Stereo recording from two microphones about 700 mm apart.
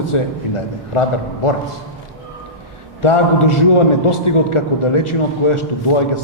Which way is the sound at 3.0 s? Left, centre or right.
Left.